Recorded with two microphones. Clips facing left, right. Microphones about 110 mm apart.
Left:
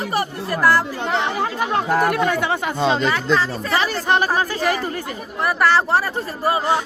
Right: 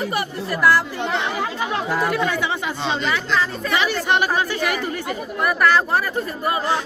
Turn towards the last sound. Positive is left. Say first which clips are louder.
# left 2 dB
turn(degrees=30)  # may be behind; listen again after turning